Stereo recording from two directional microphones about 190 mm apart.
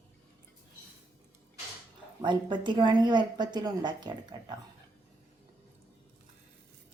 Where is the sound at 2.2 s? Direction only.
25° right (ahead or behind).